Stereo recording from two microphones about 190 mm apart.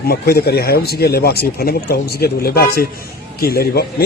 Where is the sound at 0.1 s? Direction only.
55° left (ahead or behind).